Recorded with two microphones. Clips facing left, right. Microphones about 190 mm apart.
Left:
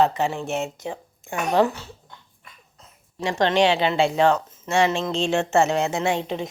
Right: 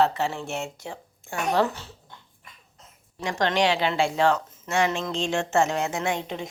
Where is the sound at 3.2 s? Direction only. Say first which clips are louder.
Left 4 dB; 25° left (ahead or behind).